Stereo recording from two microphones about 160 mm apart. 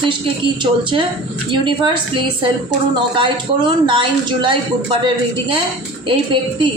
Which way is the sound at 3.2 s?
30° right (ahead or behind).